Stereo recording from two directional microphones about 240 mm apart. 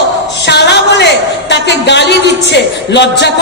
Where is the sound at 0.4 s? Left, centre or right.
Left.